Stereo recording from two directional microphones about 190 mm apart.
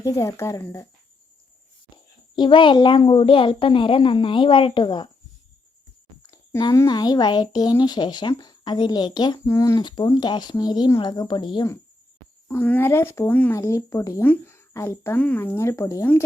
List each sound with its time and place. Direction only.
0.0 s speech: 15° left (ahead or behind)
2.3 s speech: 25° left (ahead or behind)
6.3 s speech: 20° left (ahead or behind)
12.5 s speech: 10° left (ahead or behind)